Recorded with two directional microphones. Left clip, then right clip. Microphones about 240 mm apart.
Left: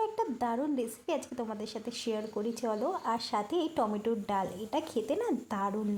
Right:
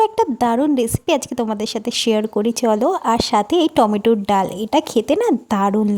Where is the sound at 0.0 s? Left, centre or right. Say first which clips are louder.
Right 16 dB; right.